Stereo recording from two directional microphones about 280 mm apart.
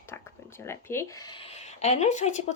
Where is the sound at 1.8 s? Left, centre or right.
Left.